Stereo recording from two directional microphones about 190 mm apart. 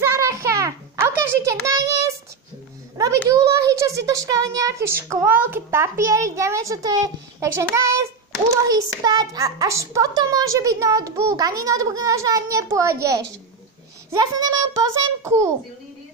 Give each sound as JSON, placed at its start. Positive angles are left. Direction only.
{"t": 0.1, "sound": "a sound", "side_deg": -15}
{"t": 1.7, "sound": "a child's voice", "side_deg": -15}
{"t": 3.3, "sound": "a child's voice", "side_deg": -15}
{"t": 14.5, "sound": "a child's voice", "side_deg": -15}